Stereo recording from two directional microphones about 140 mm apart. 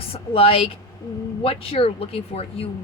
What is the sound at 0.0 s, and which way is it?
Speech, 45° left (ahead or behind).